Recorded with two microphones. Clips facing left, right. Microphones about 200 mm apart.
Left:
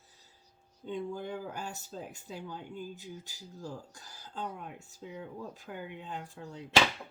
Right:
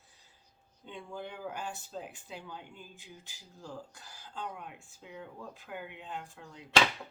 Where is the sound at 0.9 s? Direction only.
40° left (ahead or behind).